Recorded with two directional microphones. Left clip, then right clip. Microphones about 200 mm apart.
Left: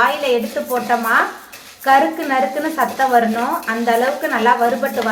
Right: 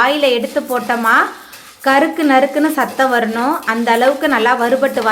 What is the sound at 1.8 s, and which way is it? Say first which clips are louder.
Speech: right 1 dB; 50° right (ahead or behind).